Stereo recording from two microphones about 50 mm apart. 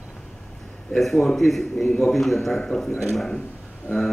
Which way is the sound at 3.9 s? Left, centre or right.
Left.